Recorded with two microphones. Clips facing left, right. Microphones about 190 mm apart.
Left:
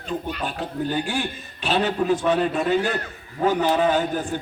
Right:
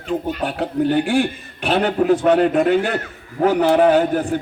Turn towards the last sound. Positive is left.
turn(degrees=-65)  # may be behind; listen again after turning